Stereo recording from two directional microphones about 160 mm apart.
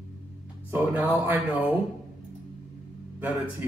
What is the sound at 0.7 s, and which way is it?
Speech, 10° right (ahead or behind).